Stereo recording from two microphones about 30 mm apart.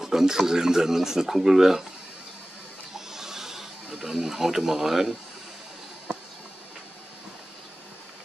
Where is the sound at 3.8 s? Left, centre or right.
Right.